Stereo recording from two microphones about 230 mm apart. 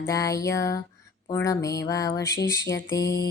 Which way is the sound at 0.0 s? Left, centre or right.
Centre.